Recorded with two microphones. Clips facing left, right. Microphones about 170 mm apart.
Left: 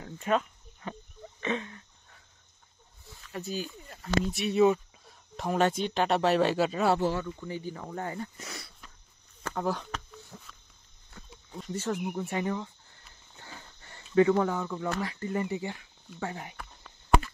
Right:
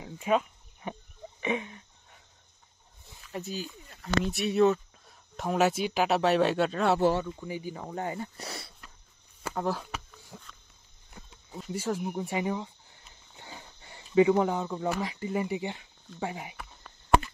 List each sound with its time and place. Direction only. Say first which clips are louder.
0.0 s insect: right 1 dB; 10° right (ahead or behind)
1.4 s a sound: right 1 dB; 15° right (ahead or behind)
3.1 s wild animals: right 1 dB; 20° right (ahead or behind)
3.4 s speech: left 2 dB; 45° left (ahead or behind)
4.6 s speech: left 1 dB; centre (ahead or behind)
7.2 s speech: right 1 dB; 15° right (ahead or behind)
8.4 s speech: right 3 dB; 30° right (ahead or behind)
9.4 s a sound: even; 5° right (ahead or behind)
11.5 s speech: right 1 dB; 5° right (ahead or behind)
12.1 s a sound: right 1 dB; 15° right (ahead or behind)
14.9 s speech: right 2 dB; 15° right (ahead or behind)